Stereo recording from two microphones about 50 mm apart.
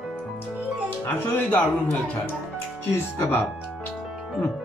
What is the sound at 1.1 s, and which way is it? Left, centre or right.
Speech, left.